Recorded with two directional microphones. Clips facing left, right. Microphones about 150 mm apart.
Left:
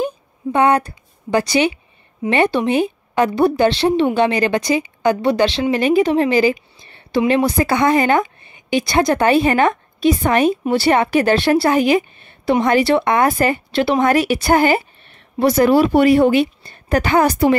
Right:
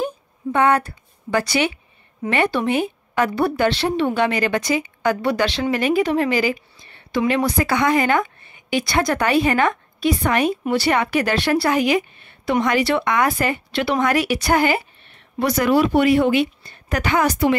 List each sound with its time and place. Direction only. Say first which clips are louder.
0.0 s a sound: left 3 dB; 20° left (ahead or behind)
2.2 s a woman's voice: left 4 dB; 25° left (ahead or behind)
13.3 s a woman's voice: left 4 dB; 40° left (ahead or behind)